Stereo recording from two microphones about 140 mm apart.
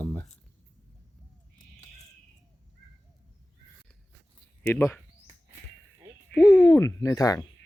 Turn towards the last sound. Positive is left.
turn(degrees=25)  # may be behind; listen again after turning